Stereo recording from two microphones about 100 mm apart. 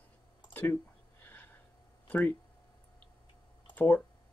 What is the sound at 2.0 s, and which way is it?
Speech, 15° left (ahead or behind).